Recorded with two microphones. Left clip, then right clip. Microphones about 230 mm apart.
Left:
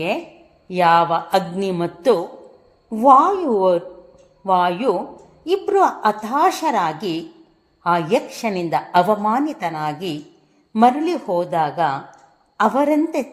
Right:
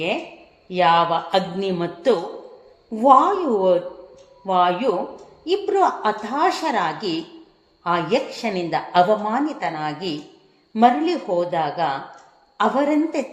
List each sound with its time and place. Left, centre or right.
0.7 s a woman's voice: left